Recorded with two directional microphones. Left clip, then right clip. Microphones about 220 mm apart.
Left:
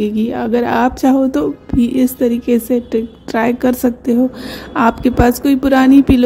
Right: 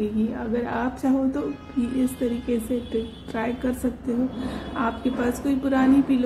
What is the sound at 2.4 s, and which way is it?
Speech, 45° left (ahead or behind).